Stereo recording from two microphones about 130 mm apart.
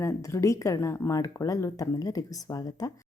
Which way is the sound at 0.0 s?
25° left (ahead or behind).